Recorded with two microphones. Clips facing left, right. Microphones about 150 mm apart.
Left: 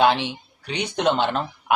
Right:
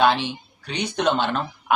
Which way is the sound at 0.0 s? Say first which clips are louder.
Even; 20° left (ahead or behind).